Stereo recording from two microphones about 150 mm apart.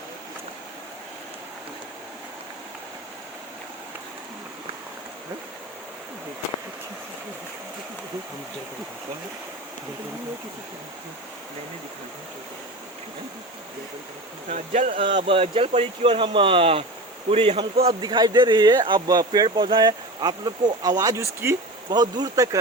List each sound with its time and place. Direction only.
14.5 s speech: 50° right (ahead or behind)
15.0 s speech: 35° right (ahead or behind)
18.0 s speech: 30° right (ahead or behind)